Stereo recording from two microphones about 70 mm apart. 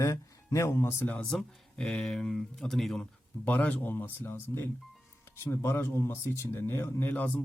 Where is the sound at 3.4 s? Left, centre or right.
Left.